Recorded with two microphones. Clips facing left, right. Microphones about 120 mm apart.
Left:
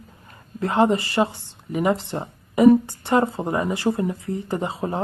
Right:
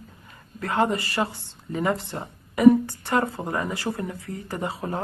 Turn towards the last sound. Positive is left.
turn(degrees=25)  # may be behind; listen again after turning